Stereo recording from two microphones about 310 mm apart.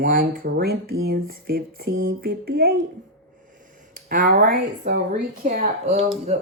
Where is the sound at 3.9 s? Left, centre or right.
Right.